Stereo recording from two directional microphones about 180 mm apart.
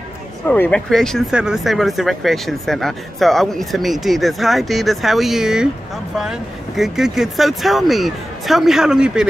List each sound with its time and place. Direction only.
0.5 s speech: 5° left (ahead or behind)
6.8 s speech: centre (ahead or behind)